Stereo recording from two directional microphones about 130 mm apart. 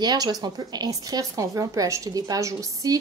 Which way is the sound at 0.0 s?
30° right (ahead or behind).